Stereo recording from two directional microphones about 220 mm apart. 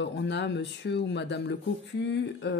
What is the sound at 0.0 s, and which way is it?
Speech, 50° left (ahead or behind).